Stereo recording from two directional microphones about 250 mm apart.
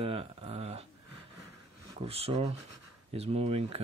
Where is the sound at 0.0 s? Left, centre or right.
Right.